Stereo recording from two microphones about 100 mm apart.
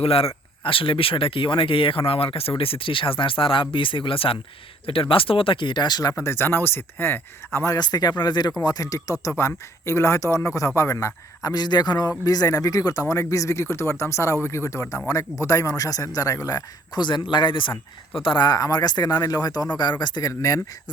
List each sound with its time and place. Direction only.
0.0 s speech: 75° left (ahead or behind)
0.6 s speech: 60° left (ahead or behind); by 6.1 s 45° left (ahead or behind)
6.1 s speech: 25° left (ahead or behind)
7.8 s speech: 45° left (ahead or behind)
18.4 s speech: 40° left (ahead or behind)